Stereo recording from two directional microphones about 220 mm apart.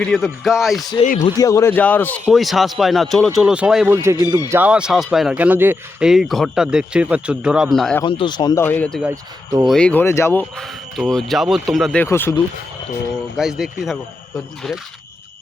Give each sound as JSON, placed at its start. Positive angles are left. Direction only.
{"t": 0.0, "sound": "speech", "side_deg": 0}
{"t": 1.2, "sound": "speech", "side_deg": 15}
{"t": 8.0, "sound": "speech", "side_deg": 20}
{"t": 9.0, "sound": "speech", "side_deg": -15}
{"t": 9.6, "sound": "speech", "side_deg": 5}
{"t": 13.3, "sound": "speech", "side_deg": 0}